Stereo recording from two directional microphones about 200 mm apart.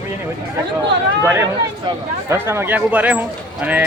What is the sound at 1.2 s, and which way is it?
Speech, 15° right (ahead or behind).